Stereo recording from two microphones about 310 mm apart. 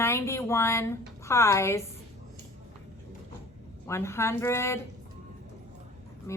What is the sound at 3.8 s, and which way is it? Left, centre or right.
Speech, centre.